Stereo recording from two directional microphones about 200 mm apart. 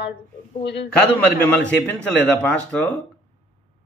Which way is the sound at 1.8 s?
5° left (ahead or behind).